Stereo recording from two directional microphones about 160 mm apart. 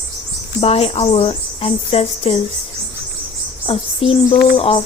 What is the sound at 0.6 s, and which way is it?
A woman's voice, 40° left (ahead or behind).